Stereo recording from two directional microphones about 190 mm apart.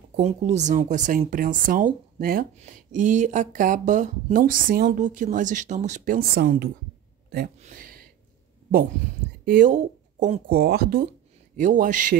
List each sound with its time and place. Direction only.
0.1 s speech: 40° right (ahead or behind); by 7.5 s 55° right (ahead or behind)
7.6 s a sound: 45° right (ahead or behind)
9.4 s speech: 50° right (ahead or behind)
10.5 s speech: 55° right (ahead or behind)
11.5 s speech: 40° right (ahead or behind)